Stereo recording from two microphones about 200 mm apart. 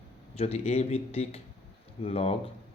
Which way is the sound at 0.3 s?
30° left (ahead or behind).